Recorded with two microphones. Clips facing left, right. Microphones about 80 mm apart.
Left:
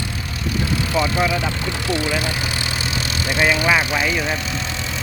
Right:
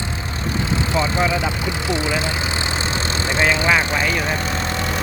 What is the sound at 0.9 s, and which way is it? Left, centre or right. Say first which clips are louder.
Speech: even; right.